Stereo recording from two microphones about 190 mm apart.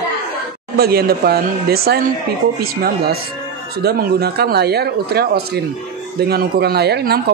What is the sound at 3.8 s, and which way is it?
Speech, 55° right (ahead or behind).